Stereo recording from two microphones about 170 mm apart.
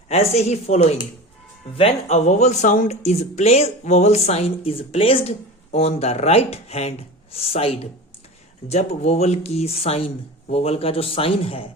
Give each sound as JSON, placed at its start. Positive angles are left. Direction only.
{"t": 0.1, "sound": "speech", "side_deg": 40}